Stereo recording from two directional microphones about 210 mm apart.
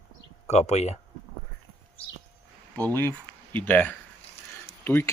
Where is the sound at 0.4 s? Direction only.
30° left (ahead or behind).